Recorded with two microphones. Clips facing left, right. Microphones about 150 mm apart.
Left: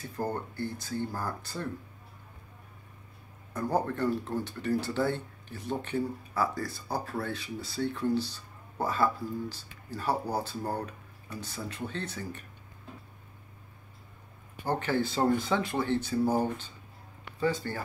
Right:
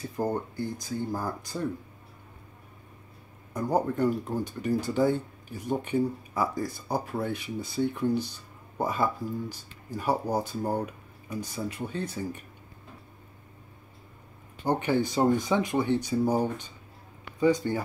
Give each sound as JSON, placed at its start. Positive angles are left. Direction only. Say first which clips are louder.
{"t": 0.2, "sound": "speech", "louder": "right 3 dB", "side_deg": -15}
{"t": 3.5, "sound": "speech", "louder": "right 3 dB", "side_deg": -15}
{"t": 14.7, "sound": "speech", "louder": "right 3 dB", "side_deg": -15}